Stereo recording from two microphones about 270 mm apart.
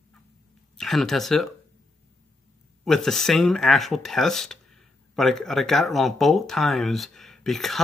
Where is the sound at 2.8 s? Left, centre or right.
Centre.